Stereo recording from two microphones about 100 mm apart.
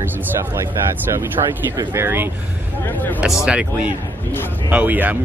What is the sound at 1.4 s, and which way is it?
Speech, 55° right (ahead or behind).